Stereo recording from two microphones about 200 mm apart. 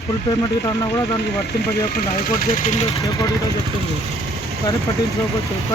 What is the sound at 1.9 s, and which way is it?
Speech, 45° left (ahead or behind).